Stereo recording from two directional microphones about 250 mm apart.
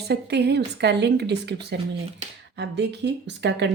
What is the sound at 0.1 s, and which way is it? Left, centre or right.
Speech, right.